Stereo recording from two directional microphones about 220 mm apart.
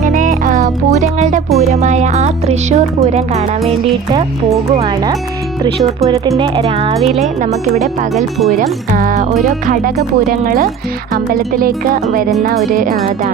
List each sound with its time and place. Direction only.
0.0 s music: 35° right (ahead or behind)
3.1 s speech: 30° right (ahead or behind)
4.7 s speech: 25° right (ahead or behind)
8.1 s speech: centre (ahead or behind)
8.5 s speech: 40° right (ahead or behind)